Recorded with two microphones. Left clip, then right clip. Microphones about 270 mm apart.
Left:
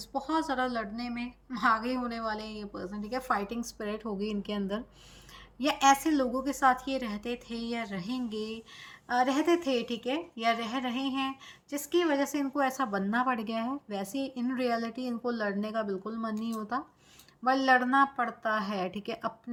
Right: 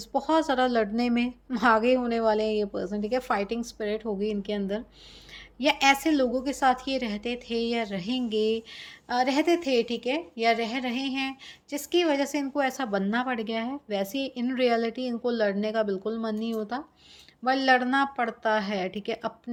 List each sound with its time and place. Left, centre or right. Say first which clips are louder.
0.1 s a woman's voice: right 7 dB; centre